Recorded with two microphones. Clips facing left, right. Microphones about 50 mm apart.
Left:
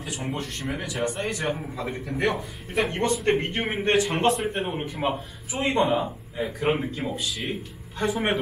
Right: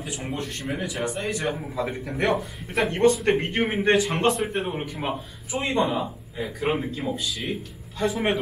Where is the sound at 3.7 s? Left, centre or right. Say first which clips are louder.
Even; centre.